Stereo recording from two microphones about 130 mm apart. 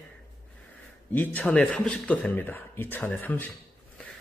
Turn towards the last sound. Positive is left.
turn(degrees=15)  # may be behind; listen again after turning